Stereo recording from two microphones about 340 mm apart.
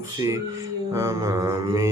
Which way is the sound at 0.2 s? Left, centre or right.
Centre.